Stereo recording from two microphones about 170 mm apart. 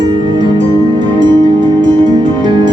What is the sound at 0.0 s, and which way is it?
Music, 25° right (ahead or behind).